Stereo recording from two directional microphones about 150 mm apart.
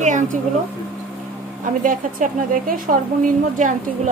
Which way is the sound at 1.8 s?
65° right (ahead or behind).